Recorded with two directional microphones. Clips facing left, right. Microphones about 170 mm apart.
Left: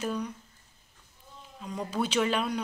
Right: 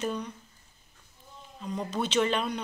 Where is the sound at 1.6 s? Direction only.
5° left (ahead or behind).